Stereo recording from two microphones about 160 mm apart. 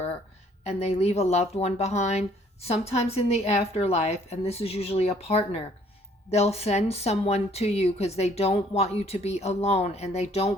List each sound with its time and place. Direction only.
0.6 s speech: 40° left (ahead or behind)